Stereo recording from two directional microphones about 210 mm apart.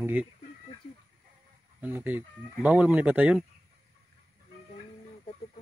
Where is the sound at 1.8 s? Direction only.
10° right (ahead or behind).